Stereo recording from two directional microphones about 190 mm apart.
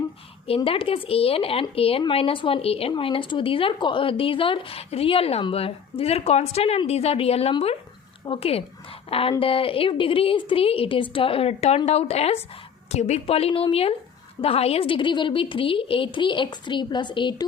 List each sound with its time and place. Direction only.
0.4 s a woman's voice: 30° left (ahead or behind)